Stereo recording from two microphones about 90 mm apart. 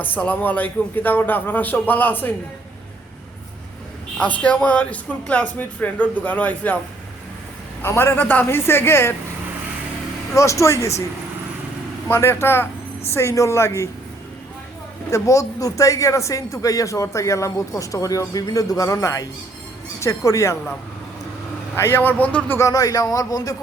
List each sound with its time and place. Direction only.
0.0 s a man's voice: 20° left (ahead or behind)
4.2 s speech: 15° left (ahead or behind)
7.8 s a man's voice: 25° left (ahead or behind)
10.3 s speech: 35° left (ahead or behind)
12.0 s a man's voice: 25° left (ahead or behind)
15.1 s speech: 35° left (ahead or behind)
21.8 s a man's voice: 25° left (ahead or behind)
22.5 s speech: 40° left (ahead or behind)